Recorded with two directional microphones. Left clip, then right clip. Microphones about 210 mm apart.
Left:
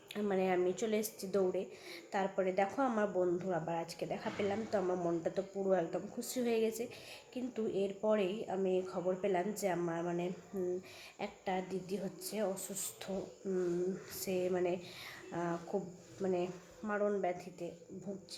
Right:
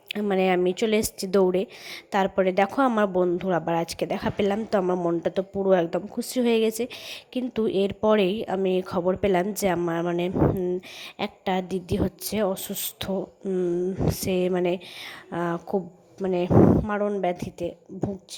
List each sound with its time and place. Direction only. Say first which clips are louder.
0.1 s a woman's voice: right 11 dB; 40° right (ahead or behind)
9.9 s a woman's voice: right 12 dB; 50° right (ahead or behind)